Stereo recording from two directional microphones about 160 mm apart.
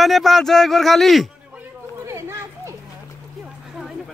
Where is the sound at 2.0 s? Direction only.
15° right (ahead or behind).